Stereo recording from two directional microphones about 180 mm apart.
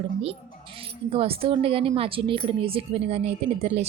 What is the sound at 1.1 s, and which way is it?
A woman's voice, 30° right (ahead or behind).